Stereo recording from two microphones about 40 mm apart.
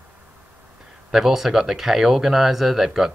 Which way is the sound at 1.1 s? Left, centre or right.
Centre.